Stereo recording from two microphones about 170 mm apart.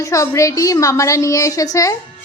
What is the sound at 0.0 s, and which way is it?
A woman's voice, 20° left (ahead or behind).